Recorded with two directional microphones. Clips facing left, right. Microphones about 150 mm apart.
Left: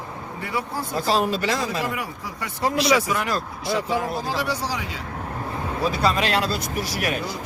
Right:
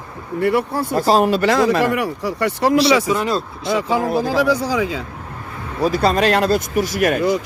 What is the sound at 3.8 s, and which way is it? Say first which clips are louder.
Speech: right 5 dB; 90° right.